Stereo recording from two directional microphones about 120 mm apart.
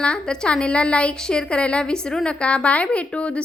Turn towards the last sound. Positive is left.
turn(degrees=10)  # may be behind; listen again after turning